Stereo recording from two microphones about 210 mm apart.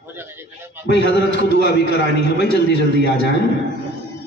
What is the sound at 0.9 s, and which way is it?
A man's voice, 55° left (ahead or behind).